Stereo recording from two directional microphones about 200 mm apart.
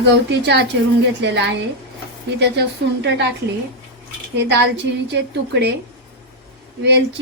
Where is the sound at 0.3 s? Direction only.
60° right (ahead or behind).